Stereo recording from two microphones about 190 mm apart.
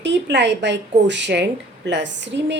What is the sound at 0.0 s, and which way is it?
A woman's voice, 65° right (ahead or behind).